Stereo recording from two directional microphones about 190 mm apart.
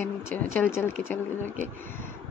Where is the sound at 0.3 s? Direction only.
10° left (ahead or behind).